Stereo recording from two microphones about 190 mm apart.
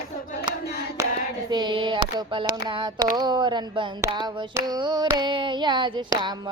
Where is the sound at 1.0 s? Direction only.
15° right (ahead or behind).